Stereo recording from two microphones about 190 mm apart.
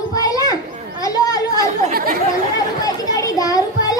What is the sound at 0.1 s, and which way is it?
Children playing, 20° left (ahead or behind).